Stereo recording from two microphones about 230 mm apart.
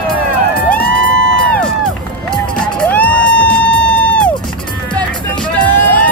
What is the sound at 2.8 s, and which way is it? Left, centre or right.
Music, centre.